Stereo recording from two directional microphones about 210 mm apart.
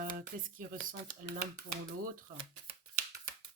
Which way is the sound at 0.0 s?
40° right (ahead or behind).